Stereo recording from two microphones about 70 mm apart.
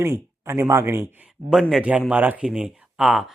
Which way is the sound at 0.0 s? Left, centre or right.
Right.